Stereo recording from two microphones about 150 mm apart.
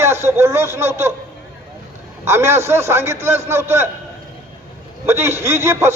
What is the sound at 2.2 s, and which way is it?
A man's voice, 15° right (ahead or behind).